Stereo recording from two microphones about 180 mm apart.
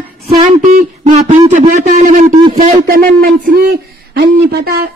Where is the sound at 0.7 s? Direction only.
45° right (ahead or behind).